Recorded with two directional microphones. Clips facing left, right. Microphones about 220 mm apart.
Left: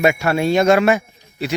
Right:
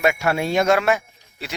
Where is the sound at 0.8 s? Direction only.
5° left (ahead or behind).